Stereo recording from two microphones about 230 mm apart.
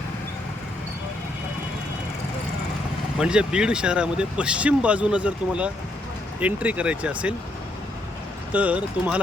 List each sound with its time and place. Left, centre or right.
3.2 s speech: centre
8.5 s speech: centre